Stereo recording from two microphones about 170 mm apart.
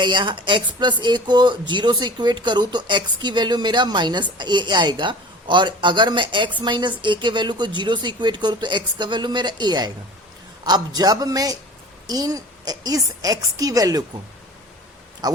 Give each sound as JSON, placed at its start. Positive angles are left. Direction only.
{"t": 0.0, "sound": "speech", "side_deg": -30}
{"t": 10.9, "sound": "speech", "side_deg": -25}
{"t": 15.2, "sound": "speech", "side_deg": -25}